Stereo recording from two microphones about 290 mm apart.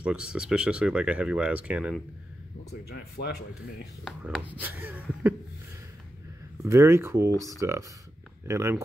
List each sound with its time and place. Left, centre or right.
0.0 s speech: centre
2.7 s speech: left
3.8 s speech: centre
6.6 s speech: centre